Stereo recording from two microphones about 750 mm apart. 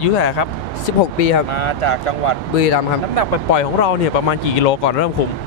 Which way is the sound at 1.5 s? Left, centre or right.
Left.